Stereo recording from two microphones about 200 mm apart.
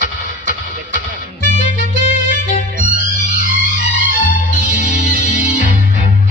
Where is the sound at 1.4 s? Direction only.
45° right (ahead or behind).